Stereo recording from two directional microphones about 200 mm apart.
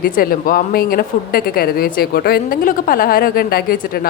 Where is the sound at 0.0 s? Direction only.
45° left (ahead or behind).